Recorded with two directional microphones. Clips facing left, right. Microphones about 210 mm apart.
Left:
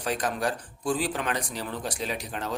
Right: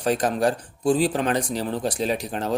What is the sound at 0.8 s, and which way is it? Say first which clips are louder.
A man's voice: right 7 dB; 25° right (ahead or behind).